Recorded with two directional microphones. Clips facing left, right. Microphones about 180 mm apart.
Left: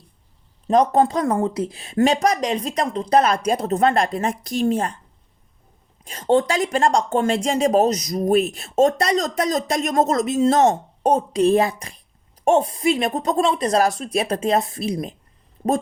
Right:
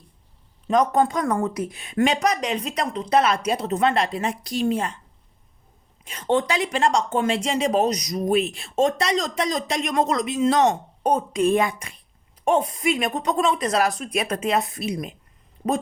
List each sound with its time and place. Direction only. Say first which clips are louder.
0.7 s speech: left 3 dB; 30° left (ahead or behind)
6.1 s speech: left 4 dB; 35° left (ahead or behind)